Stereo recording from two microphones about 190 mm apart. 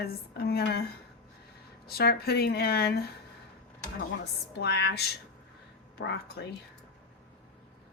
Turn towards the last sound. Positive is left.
turn(degrees=60)  # may be behind; listen again after turning